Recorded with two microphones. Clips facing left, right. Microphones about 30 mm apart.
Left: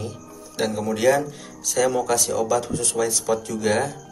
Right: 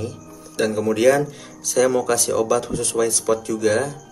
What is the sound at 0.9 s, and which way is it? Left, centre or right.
Speech, centre.